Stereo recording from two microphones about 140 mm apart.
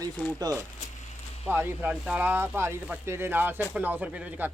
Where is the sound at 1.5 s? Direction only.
15° right (ahead or behind).